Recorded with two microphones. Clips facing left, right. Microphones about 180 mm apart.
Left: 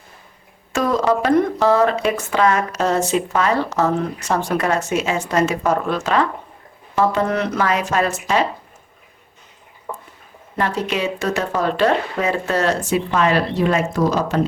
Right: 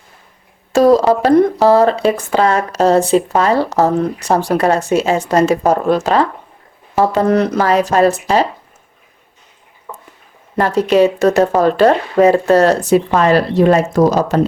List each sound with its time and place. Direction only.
0.7 s a sound: 35° right (ahead or behind)
1.6 s speech: 35° right (ahead or behind)
10.6 s speech: 40° right (ahead or behind)